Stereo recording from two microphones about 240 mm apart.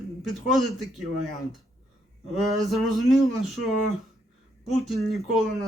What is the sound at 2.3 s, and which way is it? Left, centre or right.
A man's voice, centre.